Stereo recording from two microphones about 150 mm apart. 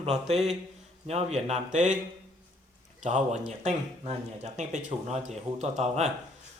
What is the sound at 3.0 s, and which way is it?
Speech, 50° right (ahead or behind).